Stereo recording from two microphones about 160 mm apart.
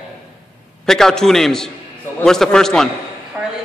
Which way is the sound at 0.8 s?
5° left (ahead or behind).